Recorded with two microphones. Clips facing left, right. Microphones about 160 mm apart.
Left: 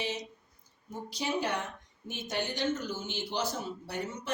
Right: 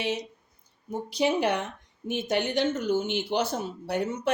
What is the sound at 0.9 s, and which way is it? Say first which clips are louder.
Speech: right 9 dB; 65° right (ahead or behind).